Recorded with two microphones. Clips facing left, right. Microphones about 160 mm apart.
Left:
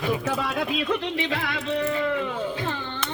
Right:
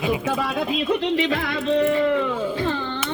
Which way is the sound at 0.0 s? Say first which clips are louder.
Right 3 dB; 10° right (ahead or behind).